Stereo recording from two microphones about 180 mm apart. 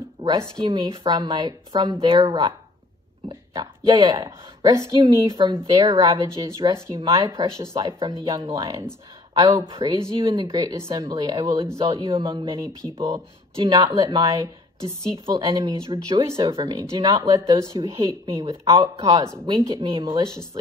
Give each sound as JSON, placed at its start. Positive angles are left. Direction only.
{"t": 0.4, "sound": "speech", "side_deg": -25}